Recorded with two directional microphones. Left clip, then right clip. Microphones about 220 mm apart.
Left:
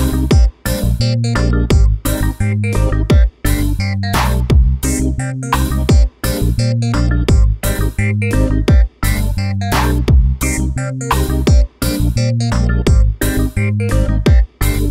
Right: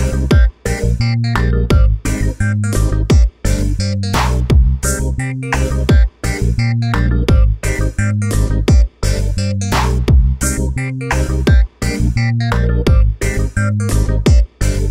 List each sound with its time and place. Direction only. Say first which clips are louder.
0.0 s music: left 1 dB; centre (ahead or behind)